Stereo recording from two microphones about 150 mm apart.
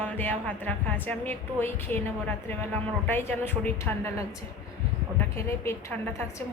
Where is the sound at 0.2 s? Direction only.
10° left (ahead or behind).